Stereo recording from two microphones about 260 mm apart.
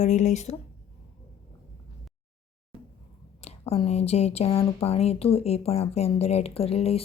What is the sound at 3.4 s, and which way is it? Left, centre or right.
Speech, left.